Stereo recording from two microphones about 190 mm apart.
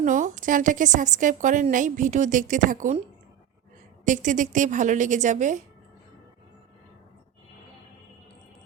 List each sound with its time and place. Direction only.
0.0 s a woman's voice: 40° right (ahead or behind)
4.0 s a woman's voice: 40° right (ahead or behind)